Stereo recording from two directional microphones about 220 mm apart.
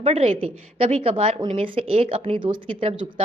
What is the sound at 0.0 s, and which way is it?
Speech, 25° right (ahead or behind).